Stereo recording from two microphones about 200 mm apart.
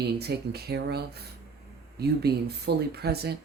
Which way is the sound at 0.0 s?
55° right (ahead or behind).